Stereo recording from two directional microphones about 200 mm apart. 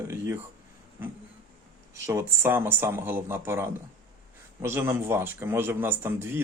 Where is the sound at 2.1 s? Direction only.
15° right (ahead or behind).